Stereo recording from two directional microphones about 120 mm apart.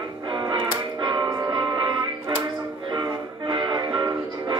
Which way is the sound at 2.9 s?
40° right (ahead or behind).